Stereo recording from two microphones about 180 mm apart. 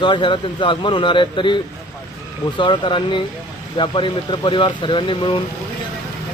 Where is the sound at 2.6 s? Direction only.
25° left (ahead or behind).